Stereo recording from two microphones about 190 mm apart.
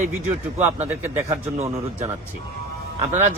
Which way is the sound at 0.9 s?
10° right (ahead or behind).